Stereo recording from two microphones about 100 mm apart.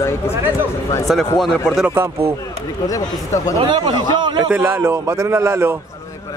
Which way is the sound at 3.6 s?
50° right (ahead or behind).